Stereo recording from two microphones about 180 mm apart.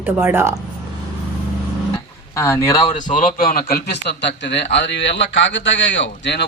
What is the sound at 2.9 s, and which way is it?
A man's voice, 45° left (ahead or behind).